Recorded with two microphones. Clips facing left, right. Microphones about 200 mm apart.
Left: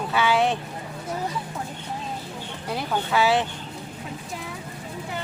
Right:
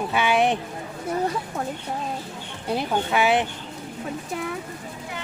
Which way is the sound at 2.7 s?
20° right (ahead or behind).